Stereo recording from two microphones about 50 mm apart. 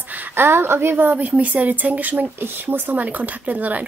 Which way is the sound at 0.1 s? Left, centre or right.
Right.